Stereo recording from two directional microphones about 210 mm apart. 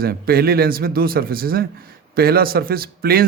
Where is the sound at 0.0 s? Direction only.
45° right (ahead or behind).